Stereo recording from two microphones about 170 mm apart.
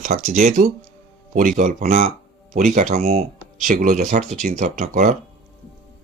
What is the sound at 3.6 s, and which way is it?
Speech, 50° right (ahead or behind).